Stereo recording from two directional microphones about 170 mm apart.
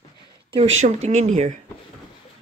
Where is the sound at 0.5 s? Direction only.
40° right (ahead or behind).